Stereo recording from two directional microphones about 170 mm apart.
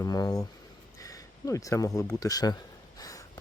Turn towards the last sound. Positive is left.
turn(degrees=20)  # may be behind; listen again after turning